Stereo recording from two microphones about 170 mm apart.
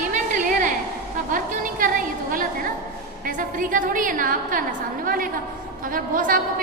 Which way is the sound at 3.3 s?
50° right (ahead or behind).